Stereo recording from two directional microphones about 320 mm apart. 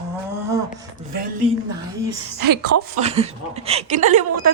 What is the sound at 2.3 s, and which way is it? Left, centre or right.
Speech, right.